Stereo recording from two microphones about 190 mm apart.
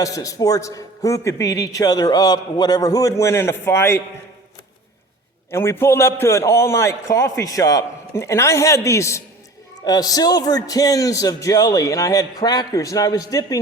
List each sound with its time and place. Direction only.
0.0 s a man's voice: 20° left (ahead or behind)
5.5 s a man's voice: 10° left (ahead or behind)